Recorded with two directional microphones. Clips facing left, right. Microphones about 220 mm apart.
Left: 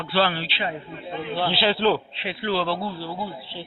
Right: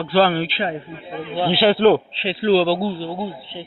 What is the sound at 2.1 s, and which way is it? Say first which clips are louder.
Speech: right 9 dB; 30° right (ahead or behind).